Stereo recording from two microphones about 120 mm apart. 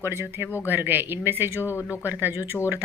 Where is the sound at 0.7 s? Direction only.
15° right (ahead or behind).